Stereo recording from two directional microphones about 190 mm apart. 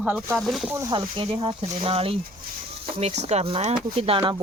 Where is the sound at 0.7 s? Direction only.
20° right (ahead or behind).